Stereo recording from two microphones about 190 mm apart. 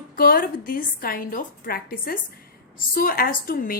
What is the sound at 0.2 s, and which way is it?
A woman's voice, 50° left (ahead or behind).